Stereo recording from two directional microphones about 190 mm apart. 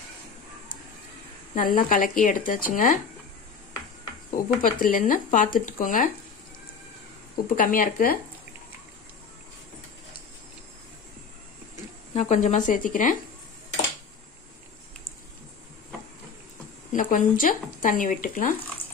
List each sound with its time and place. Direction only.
1.5 s speech: 45° left (ahead or behind)
4.6 s speech: 45° left (ahead or behind)
7.4 s speech: 45° left (ahead or behind)
12.1 s speech: 35° left (ahead or behind)
16.9 s speech: 45° left (ahead or behind)